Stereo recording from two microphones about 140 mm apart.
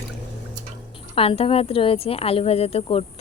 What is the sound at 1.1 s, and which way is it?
A woman's voice, 45° left (ahead or behind).